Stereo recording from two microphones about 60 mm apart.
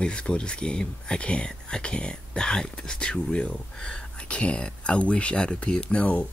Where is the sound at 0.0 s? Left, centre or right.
Centre.